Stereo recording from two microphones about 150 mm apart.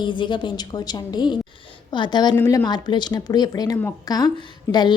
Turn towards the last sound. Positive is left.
turn(degrees=30)  # may be behind; listen again after turning